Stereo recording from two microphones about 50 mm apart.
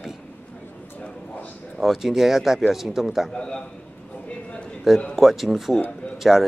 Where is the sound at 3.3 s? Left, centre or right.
Centre.